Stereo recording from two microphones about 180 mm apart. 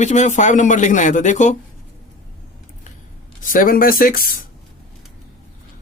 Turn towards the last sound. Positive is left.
turn(degrees=55)  # may be behind; listen again after turning